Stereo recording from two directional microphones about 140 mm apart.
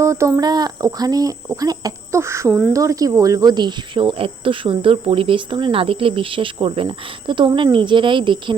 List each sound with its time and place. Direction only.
0.0 s a sound: 20° right (ahead or behind)
1.5 s speech: 25° right (ahead or behind)
2.5 s speech: 10° right (ahead or behind)
2.7 s speech: 25° right (ahead or behind)